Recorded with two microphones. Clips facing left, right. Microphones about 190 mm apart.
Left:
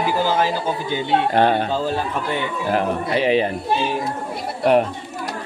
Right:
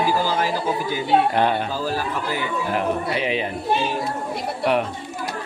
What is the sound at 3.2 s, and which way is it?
Speech, 40° left (ahead or behind).